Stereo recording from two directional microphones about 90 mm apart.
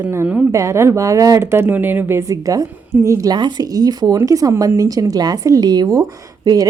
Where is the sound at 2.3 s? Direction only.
40° right (ahead or behind).